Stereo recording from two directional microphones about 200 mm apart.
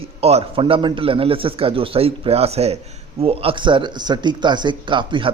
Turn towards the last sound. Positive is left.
turn(degrees=-25)  # may be behind; listen again after turning